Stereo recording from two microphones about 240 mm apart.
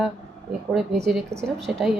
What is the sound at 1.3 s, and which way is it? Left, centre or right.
Speech, right.